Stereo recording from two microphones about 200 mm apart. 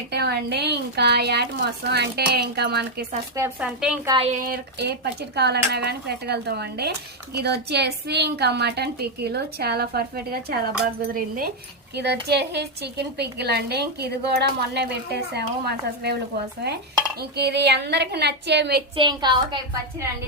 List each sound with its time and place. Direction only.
0.1 s a woman's voice: 55° right (ahead or behind)
3.3 s speech: 10° right (ahead or behind)
4.0 s a woman's voice: 20° right (ahead or behind)
4.3 s a woman's voice: 45° right (ahead or behind)
17.2 s a woman's voice: 55° right (ahead or behind)
18.9 s a woman's voice: 20° right (ahead or behind)